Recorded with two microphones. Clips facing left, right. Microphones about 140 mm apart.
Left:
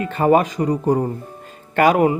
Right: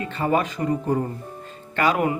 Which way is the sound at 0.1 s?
50° left (ahead or behind).